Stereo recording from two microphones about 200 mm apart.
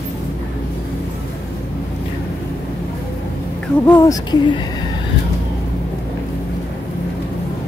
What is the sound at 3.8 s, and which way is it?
Speech, 15° left (ahead or behind).